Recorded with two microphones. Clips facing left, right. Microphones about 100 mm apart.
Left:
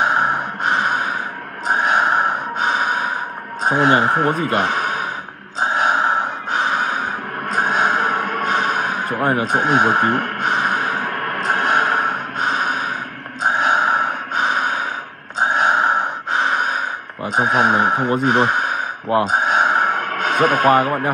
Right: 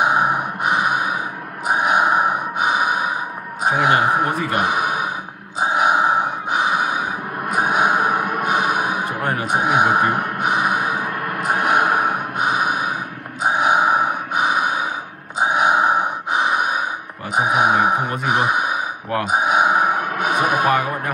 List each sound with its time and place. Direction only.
0.0 s a sound: 10° right (ahead or behind)
1.7 s gasp: 10° right (ahead or behind)
3.6 s speech: 10° right (ahead or behind)
4.6 s gasp: 10° right (ahead or behind)
9.2 s speech: 30° left (ahead or behind)
9.5 s gasp: 10° right (ahead or behind)
11.1 s a sound: 65° left (ahead or behind)
11.4 s snort: 10° right (ahead or behind)
13.4 s gasp: 10° right (ahead or behind)
17.4 s speech: 10° right (ahead or behind)
19.2 s a sound: 10° right (ahead or behind)